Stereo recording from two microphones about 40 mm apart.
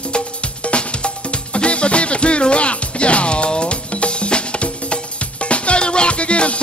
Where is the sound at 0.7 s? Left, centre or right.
Left.